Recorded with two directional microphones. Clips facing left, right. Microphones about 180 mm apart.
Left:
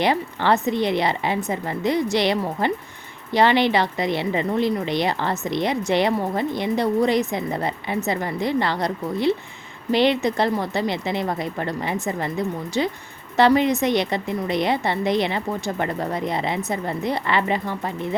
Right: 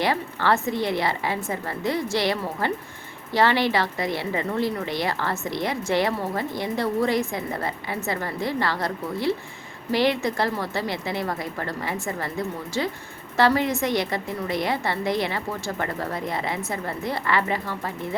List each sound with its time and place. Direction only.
0.0 s a woman's voice: 20° left (ahead or behind)
13.3 s a woman's voice: 20° left (ahead or behind)